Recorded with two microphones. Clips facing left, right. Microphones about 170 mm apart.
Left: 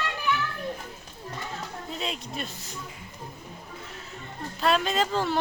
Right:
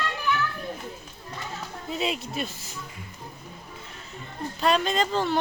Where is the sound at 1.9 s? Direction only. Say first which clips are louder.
Right 6 dB; 5° right (ahead or behind).